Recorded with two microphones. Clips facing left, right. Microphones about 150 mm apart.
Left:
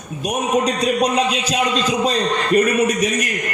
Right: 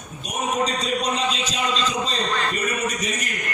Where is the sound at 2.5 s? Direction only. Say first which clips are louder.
Left 10 dB; 60° left (ahead or behind).